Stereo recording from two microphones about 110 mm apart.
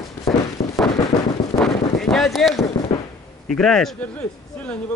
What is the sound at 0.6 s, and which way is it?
Fireworks, 70° left (ahead or behind).